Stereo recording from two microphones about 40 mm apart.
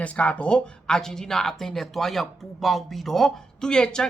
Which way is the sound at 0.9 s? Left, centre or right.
Centre.